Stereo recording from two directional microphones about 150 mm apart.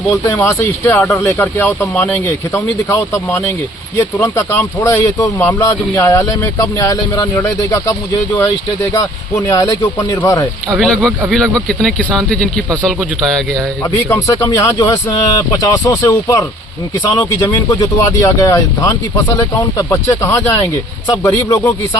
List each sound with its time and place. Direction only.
0.1 s speech: 20° left (ahead or behind)
10.8 s speech: 5° left (ahead or behind)
14.1 s speech: 20° left (ahead or behind)